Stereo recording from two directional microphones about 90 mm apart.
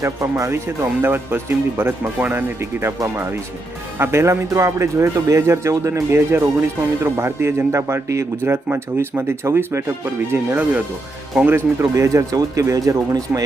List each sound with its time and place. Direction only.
0.0 s a man's voice: 35° right (ahead or behind)
10.5 s a man's voice: 20° right (ahead or behind); by 13.4 s 40° right (ahead or behind)